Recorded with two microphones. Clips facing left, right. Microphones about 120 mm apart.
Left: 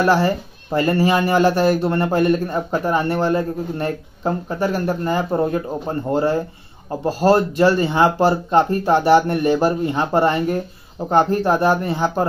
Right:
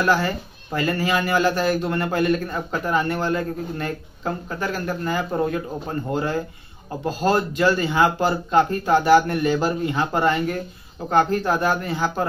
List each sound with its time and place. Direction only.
0.0 s speech: 30° left (ahead or behind)